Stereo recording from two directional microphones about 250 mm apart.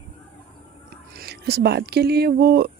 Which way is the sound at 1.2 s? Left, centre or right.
Right.